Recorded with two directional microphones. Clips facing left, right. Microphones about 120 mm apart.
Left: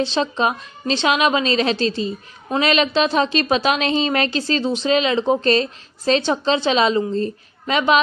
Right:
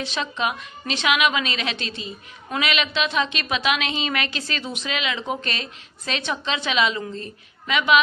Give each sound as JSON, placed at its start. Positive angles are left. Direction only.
{"t": 0.0, "sound": "a woman's voice", "side_deg": 30}